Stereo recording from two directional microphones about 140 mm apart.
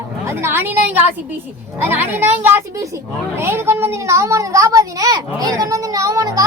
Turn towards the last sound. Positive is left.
turn(degrees=-25)  # may be behind; listen again after turning